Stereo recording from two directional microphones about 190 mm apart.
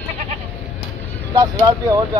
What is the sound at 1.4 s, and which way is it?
Speech, 20° right (ahead or behind).